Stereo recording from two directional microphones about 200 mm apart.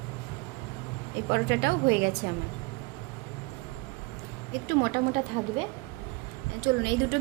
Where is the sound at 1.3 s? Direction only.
60° right (ahead or behind).